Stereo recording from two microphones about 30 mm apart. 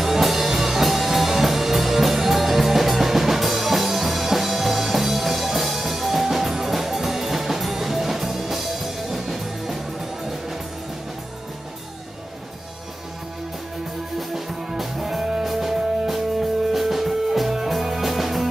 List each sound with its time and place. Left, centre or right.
0.0 s music: centre
14.3 s music: centre